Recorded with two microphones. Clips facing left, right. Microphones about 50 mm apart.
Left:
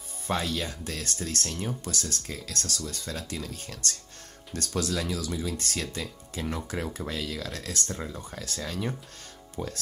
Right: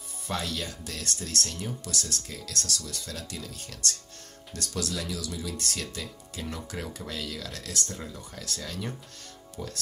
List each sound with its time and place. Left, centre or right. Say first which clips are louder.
0.3 s speech: left 3 dB; left
9.6 s speech: left 4 dB; left